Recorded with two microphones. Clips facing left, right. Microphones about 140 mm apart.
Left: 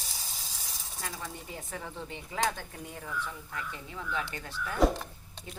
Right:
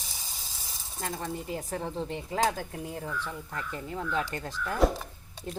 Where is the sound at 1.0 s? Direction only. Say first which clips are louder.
Right 6 dB; 50° right (ahead or behind).